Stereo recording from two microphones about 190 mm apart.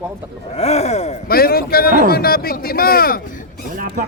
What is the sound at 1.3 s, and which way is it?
Speech, 55° left (ahead or behind).